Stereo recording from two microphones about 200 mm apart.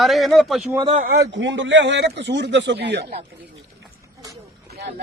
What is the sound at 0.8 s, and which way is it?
Speech, 40° right (ahead or behind).